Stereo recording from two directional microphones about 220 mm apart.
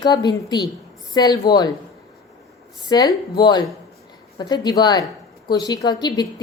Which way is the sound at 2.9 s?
20° left (ahead or behind).